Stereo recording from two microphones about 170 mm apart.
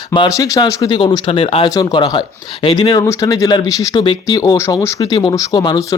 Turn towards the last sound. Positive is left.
turn(degrees=25)  # may be behind; listen again after turning